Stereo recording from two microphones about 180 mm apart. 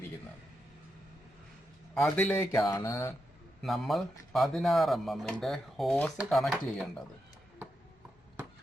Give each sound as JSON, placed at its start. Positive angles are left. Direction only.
{"t": 2.0, "sound": "speech", "side_deg": 5}
{"t": 2.3, "sound": "mantra", "side_deg": 15}
{"t": 3.6, "sound": "speech", "side_deg": 0}